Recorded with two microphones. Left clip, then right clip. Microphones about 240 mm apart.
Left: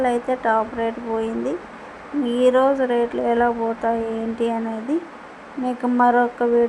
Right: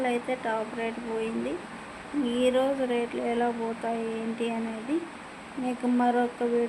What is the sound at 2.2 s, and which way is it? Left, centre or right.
Speech, centre.